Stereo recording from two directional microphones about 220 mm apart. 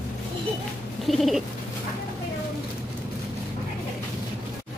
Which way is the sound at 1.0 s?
Centre (ahead or behind).